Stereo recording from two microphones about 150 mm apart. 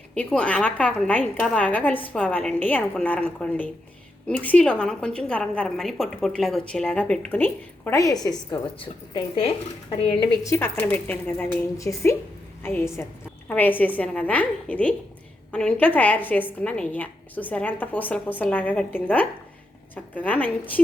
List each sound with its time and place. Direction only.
0.1 s a woman's voice: 5° left (ahead or behind); by 9.5 s 35° left (ahead or behind)
10.4 s a woman's voice: 15° left (ahead or behind)